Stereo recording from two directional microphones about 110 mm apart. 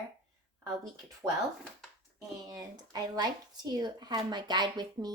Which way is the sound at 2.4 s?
35° right (ahead or behind).